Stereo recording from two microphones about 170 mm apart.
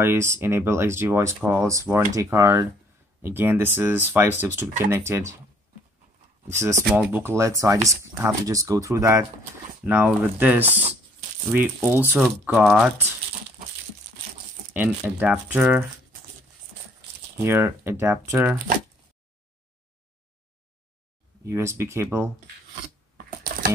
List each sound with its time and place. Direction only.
0.0 s speech: 15° right (ahead or behind)
6.4 s speech: 15° right (ahead or behind)
14.7 s speech: 10° right (ahead or behind)
17.5 s speech: 15° right (ahead or behind)
21.5 s speech: 15° right (ahead or behind)